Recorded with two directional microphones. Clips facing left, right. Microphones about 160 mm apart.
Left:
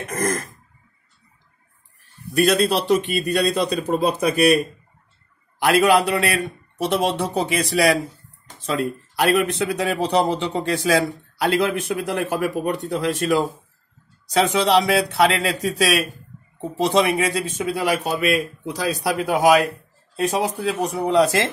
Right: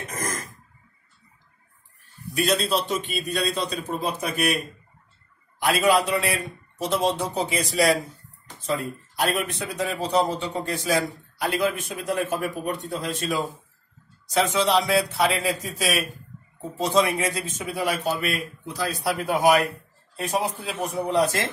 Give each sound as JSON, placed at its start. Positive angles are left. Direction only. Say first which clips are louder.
{"t": 0.1, "sound": "throat clearing", "louder": "left 9 dB", "side_deg": 60}
{"t": 2.3, "sound": "speech", "louder": "left 5 dB", "side_deg": 75}
{"t": 5.6, "sound": "speech", "louder": "left 4 dB", "side_deg": 70}
{"t": 16.7, "sound": "a man's voice", "louder": "left 3 dB", "side_deg": 75}